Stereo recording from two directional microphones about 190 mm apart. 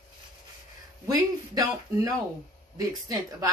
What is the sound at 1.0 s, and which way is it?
A man's voice, 20° right (ahead or behind).